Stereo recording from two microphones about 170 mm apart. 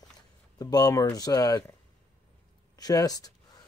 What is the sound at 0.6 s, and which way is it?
Speech, 20° left (ahead or behind).